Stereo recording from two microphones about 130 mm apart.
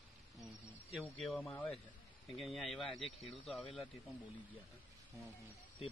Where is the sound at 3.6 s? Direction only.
40° left (ahead or behind).